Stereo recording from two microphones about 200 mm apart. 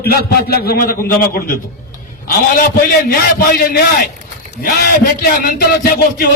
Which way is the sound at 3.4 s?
50° left (ahead or behind).